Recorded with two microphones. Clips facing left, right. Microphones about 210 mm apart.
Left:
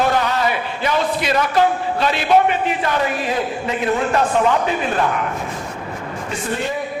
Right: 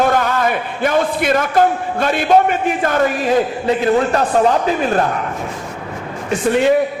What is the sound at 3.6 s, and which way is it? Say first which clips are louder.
A man's voice: right 4 dB; 35° right (ahead or behind).